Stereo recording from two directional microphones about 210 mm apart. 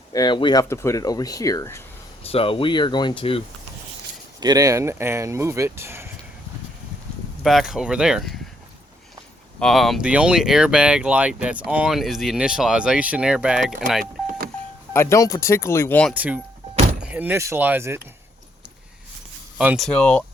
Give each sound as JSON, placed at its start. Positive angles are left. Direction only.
{"t": 0.1, "sound": "speech", "side_deg": 20}
{"t": 2.2, "sound": "speech", "side_deg": 25}
{"t": 4.4, "sound": "speech", "side_deg": -20}
{"t": 7.4, "sound": "speech", "side_deg": 0}
{"t": 9.6, "sound": "speech", "side_deg": 0}
{"t": 14.0, "sound": "power windows", "side_deg": -45}
{"t": 14.9, "sound": "speech", "side_deg": 15}
{"t": 16.1, "sound": "speech", "side_deg": -5}
{"t": 19.5, "sound": "speech", "side_deg": -5}